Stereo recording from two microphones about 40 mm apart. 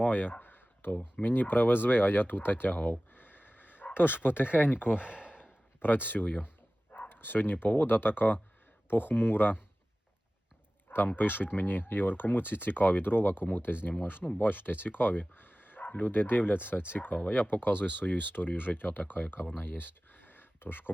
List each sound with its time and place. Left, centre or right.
0.0 s a sound: left
1.2 s speech: left
2.9 s a sound: left
3.9 s speech: left
4.9 s a sound: right
5.8 s speech: left
10.8 s fowl: left
11.2 s speech: left
15.3 s bow-wow: left
15.9 s speech: left
16.1 s speech: left